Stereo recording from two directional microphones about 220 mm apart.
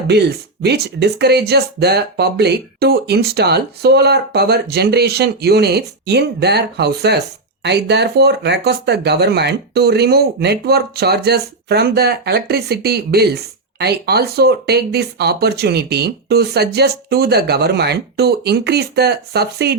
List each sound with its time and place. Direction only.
0.1 s speech: 50° right (ahead or behind)